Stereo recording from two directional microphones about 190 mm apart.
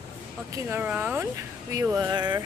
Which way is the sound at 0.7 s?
10° right (ahead or behind).